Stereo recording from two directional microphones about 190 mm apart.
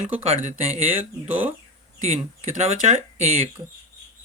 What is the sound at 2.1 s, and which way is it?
Speech, 35° right (ahead or behind).